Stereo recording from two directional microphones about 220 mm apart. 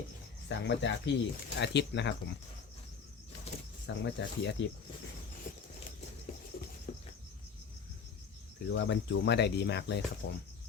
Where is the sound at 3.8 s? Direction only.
55° left (ahead or behind).